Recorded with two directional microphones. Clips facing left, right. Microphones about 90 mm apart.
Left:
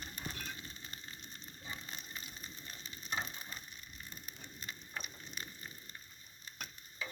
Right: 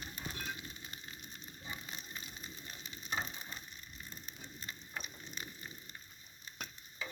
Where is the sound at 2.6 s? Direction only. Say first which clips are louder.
Right 1 dB; 15° right (ahead or behind).